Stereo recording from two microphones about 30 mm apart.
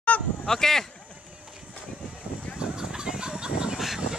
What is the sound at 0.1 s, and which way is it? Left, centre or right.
Fowl, left.